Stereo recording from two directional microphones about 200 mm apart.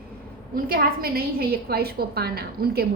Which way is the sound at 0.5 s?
50° right (ahead or behind).